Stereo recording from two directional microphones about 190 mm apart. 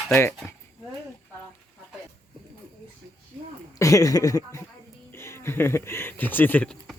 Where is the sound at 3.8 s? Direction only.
15° left (ahead or behind).